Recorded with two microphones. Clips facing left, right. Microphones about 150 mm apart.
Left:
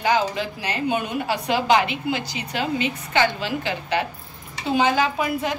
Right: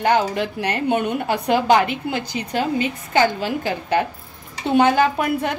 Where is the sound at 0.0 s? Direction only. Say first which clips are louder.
Right 3 dB; 55° right (ahead or behind).